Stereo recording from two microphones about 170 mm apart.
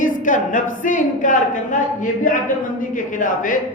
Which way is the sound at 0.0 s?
50° left (ahead or behind).